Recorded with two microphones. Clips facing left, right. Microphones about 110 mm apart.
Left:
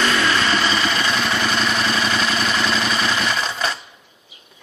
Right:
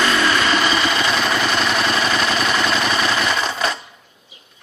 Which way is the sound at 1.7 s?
40° right (ahead or behind).